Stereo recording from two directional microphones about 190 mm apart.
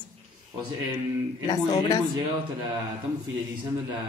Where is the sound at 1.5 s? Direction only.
20° left (ahead or behind).